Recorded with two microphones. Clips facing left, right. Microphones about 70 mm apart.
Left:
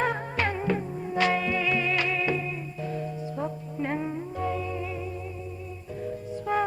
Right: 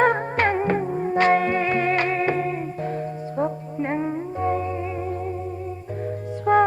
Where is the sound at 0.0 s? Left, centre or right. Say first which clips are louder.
Right 8 dB; right.